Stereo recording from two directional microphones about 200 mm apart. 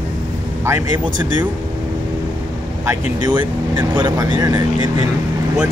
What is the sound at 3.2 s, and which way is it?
Speech, 20° right (ahead or behind).